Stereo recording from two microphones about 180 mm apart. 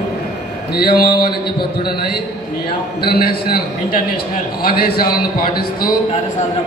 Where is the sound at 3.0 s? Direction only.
60° left (ahead or behind).